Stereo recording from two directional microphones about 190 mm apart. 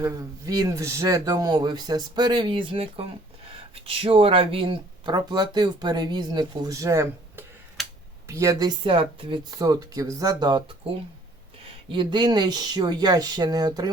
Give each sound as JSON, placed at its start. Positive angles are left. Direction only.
{"t": 0.0, "sound": "speech", "side_deg": -20}
{"t": 11.9, "sound": "speech", "side_deg": -25}